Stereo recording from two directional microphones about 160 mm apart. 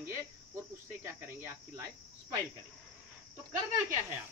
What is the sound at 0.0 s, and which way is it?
Cricket, 15° right (ahead or behind).